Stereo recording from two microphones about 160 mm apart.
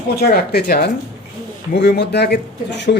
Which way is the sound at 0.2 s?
75° left (ahead or behind).